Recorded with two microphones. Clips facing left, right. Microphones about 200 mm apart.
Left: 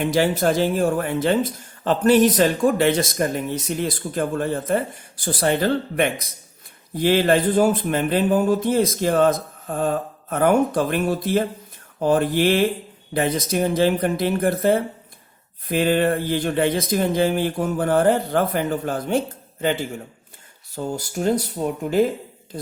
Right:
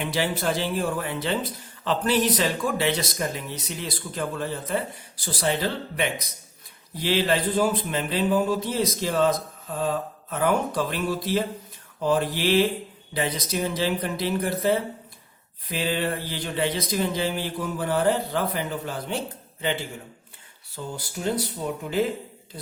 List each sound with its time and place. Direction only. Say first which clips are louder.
0.0 s speech: left 7 dB; 45° left (ahead or behind)
20.7 s speech: left 8 dB; 45° left (ahead or behind)